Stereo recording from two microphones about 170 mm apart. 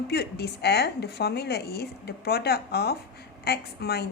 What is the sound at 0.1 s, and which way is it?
A woman's voice, 70° left (ahead or behind).